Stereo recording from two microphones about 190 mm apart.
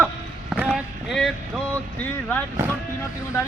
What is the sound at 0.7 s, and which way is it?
Speech, centre (ahead or behind).